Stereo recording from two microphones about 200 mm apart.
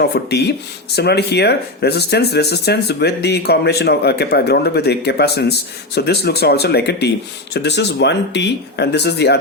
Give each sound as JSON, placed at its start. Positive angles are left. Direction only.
{"t": 0.0, "sound": "speech", "side_deg": 55}